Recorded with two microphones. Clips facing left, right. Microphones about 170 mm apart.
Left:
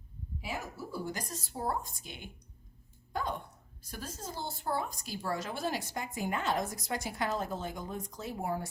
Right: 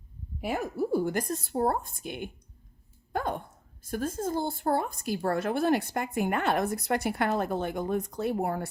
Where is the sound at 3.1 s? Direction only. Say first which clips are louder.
Right 5 dB; 55° right (ahead or behind).